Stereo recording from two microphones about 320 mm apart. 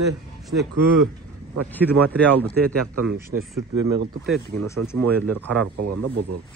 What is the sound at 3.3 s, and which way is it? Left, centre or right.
Speech, right.